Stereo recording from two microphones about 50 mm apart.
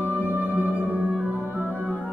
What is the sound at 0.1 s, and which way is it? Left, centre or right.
Music, right.